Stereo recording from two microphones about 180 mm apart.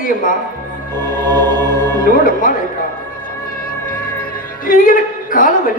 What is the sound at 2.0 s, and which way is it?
Speech, 50° left (ahead or behind).